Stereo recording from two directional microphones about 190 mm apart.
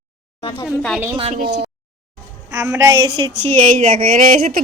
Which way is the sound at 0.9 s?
5° right (ahead or behind).